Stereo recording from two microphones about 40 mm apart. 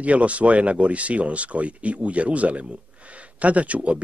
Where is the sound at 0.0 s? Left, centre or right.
Right.